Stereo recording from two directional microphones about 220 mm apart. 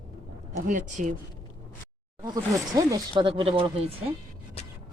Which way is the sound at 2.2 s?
15° right (ahead or behind).